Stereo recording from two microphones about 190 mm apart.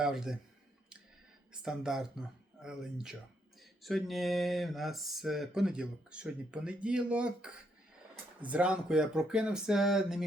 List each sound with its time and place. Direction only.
0.0 s speech: centre (ahead or behind)
1.6 s speech: 5° right (ahead or behind)